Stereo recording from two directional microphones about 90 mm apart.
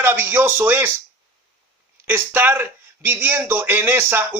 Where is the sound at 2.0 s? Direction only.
25° right (ahead or behind).